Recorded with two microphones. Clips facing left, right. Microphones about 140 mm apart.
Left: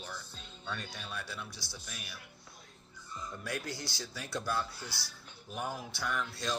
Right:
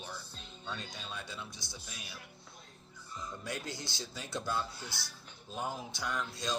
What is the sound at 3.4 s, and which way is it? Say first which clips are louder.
A man's voice: left 3 dB; 20° right (ahead or behind).